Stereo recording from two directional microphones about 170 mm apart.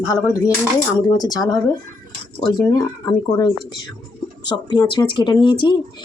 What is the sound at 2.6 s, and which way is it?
Speech, 20° left (ahead or behind).